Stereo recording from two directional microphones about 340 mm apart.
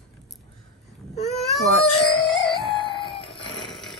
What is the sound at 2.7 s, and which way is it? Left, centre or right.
Music, centre.